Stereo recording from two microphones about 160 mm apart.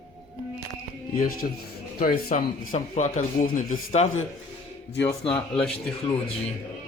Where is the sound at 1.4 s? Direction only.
55° left (ahead or behind).